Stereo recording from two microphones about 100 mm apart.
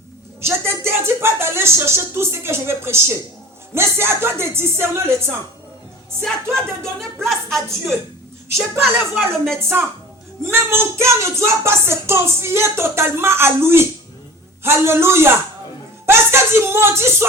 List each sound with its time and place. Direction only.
0.4 s speech: 25° right (ahead or behind)
7.3 s speech: centre (ahead or behind)
9.6 s speech: 25° right (ahead or behind)